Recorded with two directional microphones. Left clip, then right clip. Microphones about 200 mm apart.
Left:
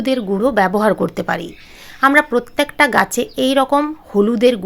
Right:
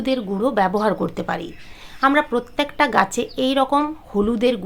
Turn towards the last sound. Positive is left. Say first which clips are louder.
# left 6 dB
turn(degrees=25)  # may be behind; listen again after turning